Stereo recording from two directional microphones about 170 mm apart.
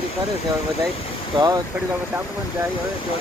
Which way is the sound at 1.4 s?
20° right (ahead or behind).